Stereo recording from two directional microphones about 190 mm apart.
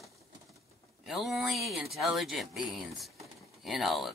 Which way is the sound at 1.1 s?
Centre (ahead or behind).